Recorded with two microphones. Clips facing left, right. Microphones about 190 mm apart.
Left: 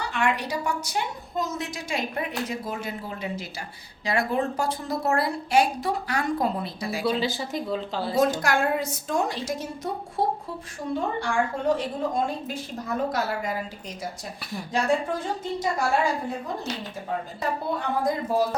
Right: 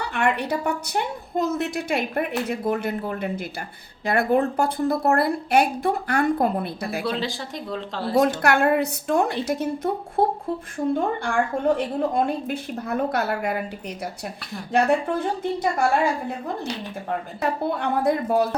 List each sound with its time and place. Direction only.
0.1 s a woman's voice: 60° right (ahead or behind)
7.0 s speech: 5° left (ahead or behind)
8.2 s a woman's voice: 60° right (ahead or behind)
14.7 s a woman's voice: 60° right (ahead or behind)
17.7 s a woman's voice: 65° right (ahead or behind)